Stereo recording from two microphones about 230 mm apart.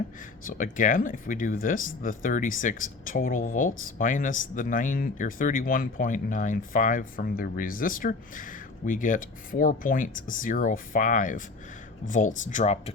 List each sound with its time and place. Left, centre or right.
0.4 s speech: left